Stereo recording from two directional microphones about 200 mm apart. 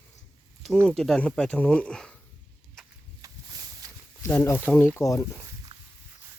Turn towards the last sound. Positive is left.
turn(degrees=15)  # may be behind; listen again after turning